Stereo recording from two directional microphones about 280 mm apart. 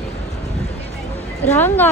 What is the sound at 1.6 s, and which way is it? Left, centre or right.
Speech, centre.